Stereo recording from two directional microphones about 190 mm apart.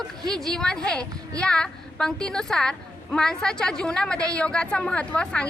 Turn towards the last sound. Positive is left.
turn(degrees=5)  # may be behind; listen again after turning